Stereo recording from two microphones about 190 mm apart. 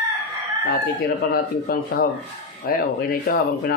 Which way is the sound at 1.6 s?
50° left (ahead or behind).